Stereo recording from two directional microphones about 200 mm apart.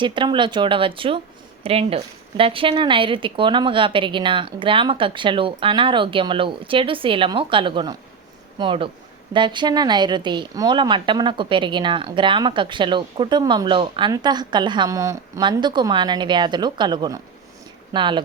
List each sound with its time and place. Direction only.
0.0 s speech: 25° right (ahead or behind)